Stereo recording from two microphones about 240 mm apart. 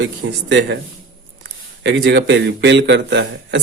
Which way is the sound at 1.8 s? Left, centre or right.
Right.